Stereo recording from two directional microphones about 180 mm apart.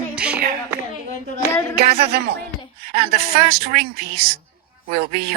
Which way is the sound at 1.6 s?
65° right (ahead or behind).